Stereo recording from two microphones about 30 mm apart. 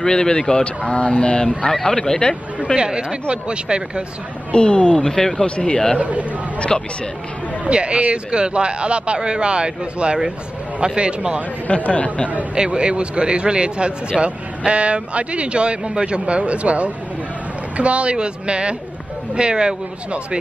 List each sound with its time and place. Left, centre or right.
0.0 s speech: left
0.9 s speech: left
1.7 s speech: centre
2.7 s speech: right
4.5 s speech: left
5.0 s speech: centre
5.9 s speech: right
6.7 s speech: centre
7.7 s speech: right
11.6 s speech: left
12.5 s speech: right
14.2 s speech: right
14.6 s speech: right